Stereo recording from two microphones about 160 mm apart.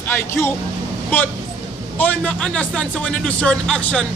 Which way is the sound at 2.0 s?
10° left (ahead or behind).